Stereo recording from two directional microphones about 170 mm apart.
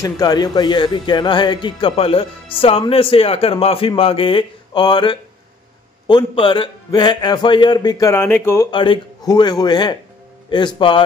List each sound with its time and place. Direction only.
0.0 s a man's voice: 20° left (ahead or behind)
8.7 s a man's voice: 30° left (ahead or behind)